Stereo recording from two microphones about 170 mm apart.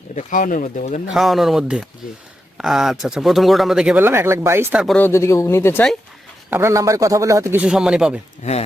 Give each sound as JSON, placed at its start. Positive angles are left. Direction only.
{"t": 0.2, "sound": "speech", "side_deg": 50}
{"t": 1.1, "sound": "speech", "side_deg": 0}
{"t": 4.9, "sound": "speech", "side_deg": 15}
{"t": 6.5, "sound": "a man's voice", "side_deg": -15}
{"t": 7.6, "sound": "speech", "side_deg": -5}